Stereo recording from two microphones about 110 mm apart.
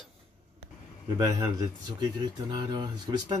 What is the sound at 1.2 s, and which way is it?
Speech, 35° right (ahead or behind).